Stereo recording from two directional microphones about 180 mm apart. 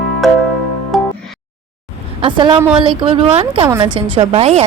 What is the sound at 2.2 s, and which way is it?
A woman's voice, 30° right (ahead or behind).